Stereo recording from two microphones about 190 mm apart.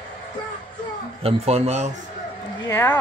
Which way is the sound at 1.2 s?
35° right (ahead or behind).